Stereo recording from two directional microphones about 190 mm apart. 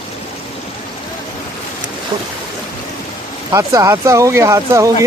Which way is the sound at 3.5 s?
15° right (ahead or behind).